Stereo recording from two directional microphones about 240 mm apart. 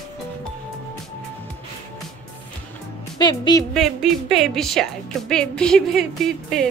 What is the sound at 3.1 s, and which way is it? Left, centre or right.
Speech, centre.